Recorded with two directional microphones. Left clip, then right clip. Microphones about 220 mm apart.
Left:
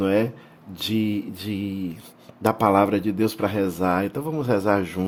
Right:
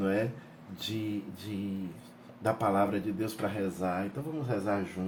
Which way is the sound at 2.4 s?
50° left (ahead or behind).